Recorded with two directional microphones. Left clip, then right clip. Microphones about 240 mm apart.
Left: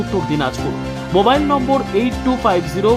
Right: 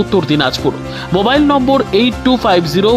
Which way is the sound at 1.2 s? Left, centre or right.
Right.